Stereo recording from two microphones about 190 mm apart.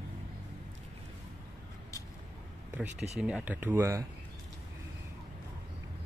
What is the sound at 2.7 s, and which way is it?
Speech, 5° right (ahead or behind).